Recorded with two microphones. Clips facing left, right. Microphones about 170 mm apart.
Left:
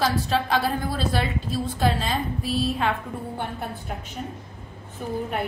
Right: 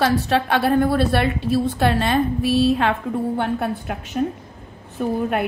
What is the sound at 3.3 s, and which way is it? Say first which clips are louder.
Speech: right 9 dB; 85° right.